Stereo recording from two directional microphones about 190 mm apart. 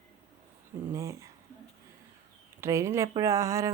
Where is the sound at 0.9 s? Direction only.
15° right (ahead or behind).